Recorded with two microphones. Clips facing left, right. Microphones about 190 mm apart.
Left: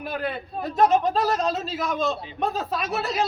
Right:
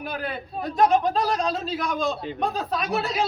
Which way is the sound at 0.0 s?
Centre (ahead or behind).